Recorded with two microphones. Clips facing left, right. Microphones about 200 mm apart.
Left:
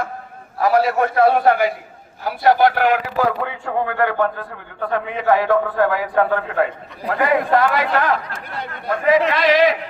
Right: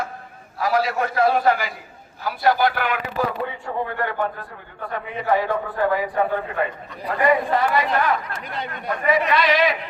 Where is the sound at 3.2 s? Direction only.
90° left.